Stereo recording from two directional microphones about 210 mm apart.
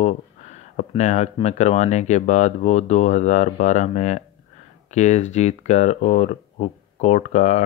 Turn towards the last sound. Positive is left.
turn(degrees=35)  # may be behind; listen again after turning